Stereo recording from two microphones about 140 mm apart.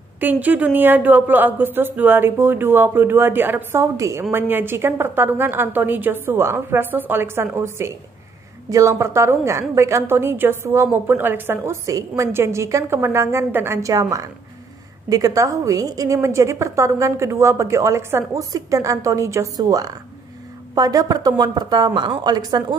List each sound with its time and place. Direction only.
0.2 s a woman's voice: 10° right (ahead or behind); by 22.8 s 30° right (ahead or behind)